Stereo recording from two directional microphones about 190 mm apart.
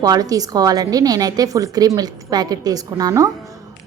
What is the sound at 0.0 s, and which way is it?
A woman's voice, 20° right (ahead or behind).